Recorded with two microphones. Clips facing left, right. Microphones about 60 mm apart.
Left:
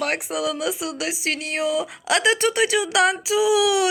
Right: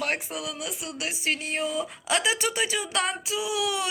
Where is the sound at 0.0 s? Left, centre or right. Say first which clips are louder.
Left 6 dB; left.